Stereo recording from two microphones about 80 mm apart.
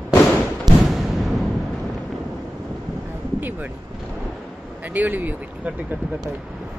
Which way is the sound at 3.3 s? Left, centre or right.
Right.